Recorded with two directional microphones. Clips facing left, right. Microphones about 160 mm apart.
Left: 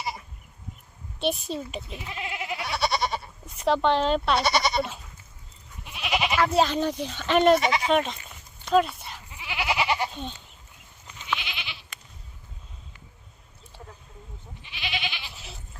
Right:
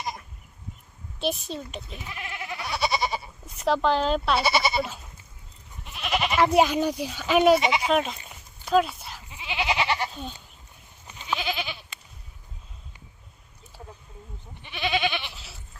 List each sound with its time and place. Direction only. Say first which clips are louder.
0.0 s sheep: even; 5° left (ahead or behind)
1.2 s speech: left 1 dB; centre (ahead or behind)
2.0 s goat: left 4 dB; 20° left (ahead or behind)
2.6 s goat: right 1 dB; centre (ahead or behind)
3.6 s speech: left 1 dB; centre (ahead or behind)
5.8 s goat: even; centre (ahead or behind)
6.5 s speech: right 2 dB; 10° right (ahead or behind)
8.6 s a sound: even; centre (ahead or behind)
9.3 s goat: right 1 dB; 20° right (ahead or behind)
9.8 s goat: left 1 dB; 10° left (ahead or behind)
10.1 s goat: left 1 dB; 5° right (ahead or behind)
11.3 s goat: right 4 dB; 40° right (ahead or behind)
14.6 s goat: right 8 dB; 55° right (ahead or behind)